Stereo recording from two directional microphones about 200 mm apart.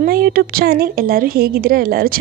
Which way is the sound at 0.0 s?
50° right (ahead or behind).